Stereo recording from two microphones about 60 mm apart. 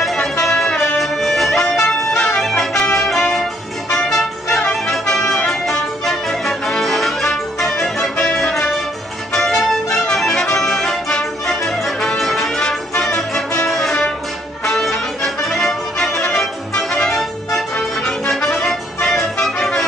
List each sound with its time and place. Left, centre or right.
0.0 s music: centre